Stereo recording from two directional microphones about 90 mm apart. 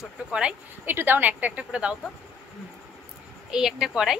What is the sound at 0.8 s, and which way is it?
A woman's voice, 25° right (ahead or behind).